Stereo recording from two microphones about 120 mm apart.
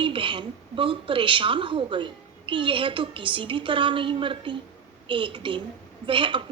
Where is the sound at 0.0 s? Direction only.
45° right (ahead or behind).